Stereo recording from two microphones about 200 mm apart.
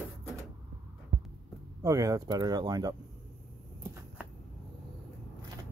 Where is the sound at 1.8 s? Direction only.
15° right (ahead or behind).